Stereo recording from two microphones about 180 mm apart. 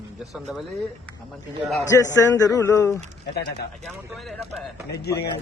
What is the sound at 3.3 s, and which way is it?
Speech, 65° left (ahead or behind).